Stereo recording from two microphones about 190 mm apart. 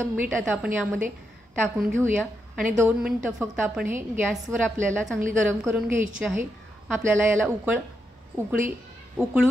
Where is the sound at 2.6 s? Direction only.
10° right (ahead or behind).